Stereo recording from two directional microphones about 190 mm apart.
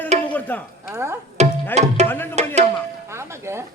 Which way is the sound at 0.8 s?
15° right (ahead or behind).